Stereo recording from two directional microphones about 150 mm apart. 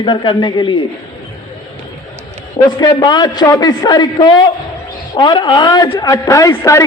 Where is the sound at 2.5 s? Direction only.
25° left (ahead or behind).